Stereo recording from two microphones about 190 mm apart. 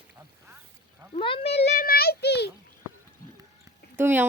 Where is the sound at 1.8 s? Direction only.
55° left (ahead or behind).